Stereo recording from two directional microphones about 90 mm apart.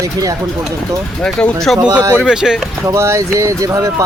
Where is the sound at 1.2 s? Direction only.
5° left (ahead or behind).